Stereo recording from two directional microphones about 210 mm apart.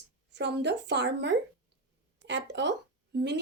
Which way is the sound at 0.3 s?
55° right (ahead or behind).